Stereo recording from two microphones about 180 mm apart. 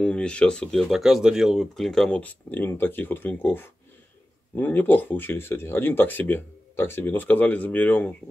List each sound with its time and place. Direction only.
0.0 s speech: 5° left (ahead or behind)